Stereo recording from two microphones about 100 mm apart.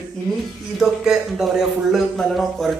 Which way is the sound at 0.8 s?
5° right (ahead or behind).